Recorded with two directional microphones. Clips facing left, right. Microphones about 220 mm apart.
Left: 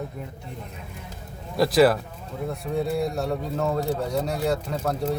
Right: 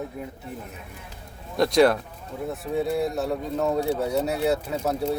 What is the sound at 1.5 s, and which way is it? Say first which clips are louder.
A man's voice: even; 5° left (ahead or behind).